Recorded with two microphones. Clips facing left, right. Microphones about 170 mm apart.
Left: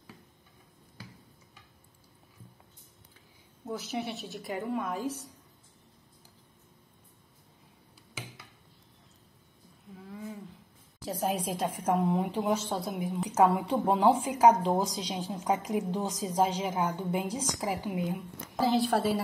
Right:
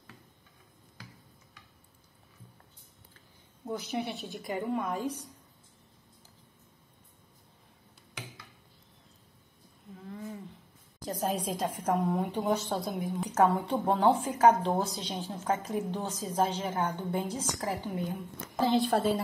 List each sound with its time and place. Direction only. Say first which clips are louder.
3.7 s a woman's voice: right 1 dB; centre (ahead or behind)
9.9 s a sound: even; 5° left (ahead or behind)
11.1 s a woman's voice: left 1 dB; 5° left (ahead or behind)